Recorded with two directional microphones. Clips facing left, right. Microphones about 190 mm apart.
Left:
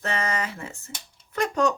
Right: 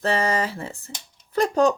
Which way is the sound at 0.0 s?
30° right (ahead or behind).